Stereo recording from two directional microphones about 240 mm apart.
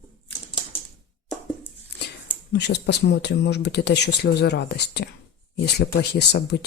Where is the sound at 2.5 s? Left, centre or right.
Left.